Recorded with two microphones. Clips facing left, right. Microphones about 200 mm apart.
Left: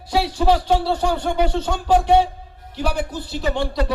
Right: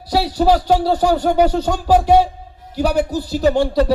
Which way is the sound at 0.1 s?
40° right (ahead or behind).